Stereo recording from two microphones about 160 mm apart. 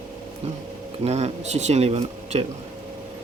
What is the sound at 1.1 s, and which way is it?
Speech, 40° right (ahead or behind).